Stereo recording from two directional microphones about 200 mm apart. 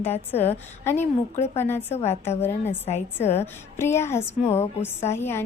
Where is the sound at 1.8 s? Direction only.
30° left (ahead or behind).